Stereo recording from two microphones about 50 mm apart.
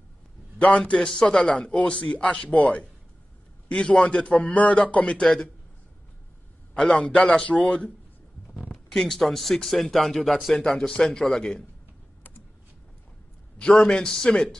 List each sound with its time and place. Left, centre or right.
0.6 s a man's voice: left
5.2 s a man's voice: centre
6.8 s a man's voice: centre
8.9 s a man's voice: centre
13.7 s a man's voice: centre